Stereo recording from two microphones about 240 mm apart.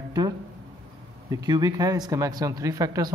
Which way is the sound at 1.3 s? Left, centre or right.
Centre.